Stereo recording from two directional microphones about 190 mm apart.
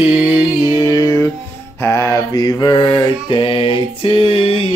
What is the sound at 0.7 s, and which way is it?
Mantra, 20° left (ahead or behind).